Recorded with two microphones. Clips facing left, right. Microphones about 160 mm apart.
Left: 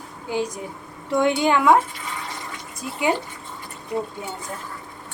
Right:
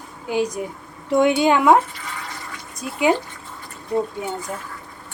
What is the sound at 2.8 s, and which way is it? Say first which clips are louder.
Speech: right 2 dB; 20° right (ahead or behind).